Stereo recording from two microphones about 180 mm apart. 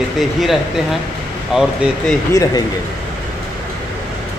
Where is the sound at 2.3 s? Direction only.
20° left (ahead or behind).